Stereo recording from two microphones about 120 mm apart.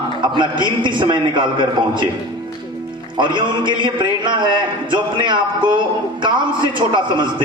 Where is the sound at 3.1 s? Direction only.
40° right (ahead or behind).